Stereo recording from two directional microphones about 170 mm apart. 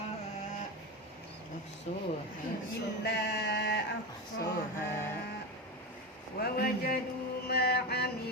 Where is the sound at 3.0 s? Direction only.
80° left.